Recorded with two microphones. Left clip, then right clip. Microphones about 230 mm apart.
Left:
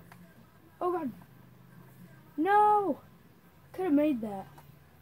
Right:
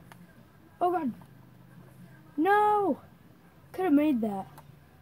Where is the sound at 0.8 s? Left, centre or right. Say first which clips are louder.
Right 4 dB; right.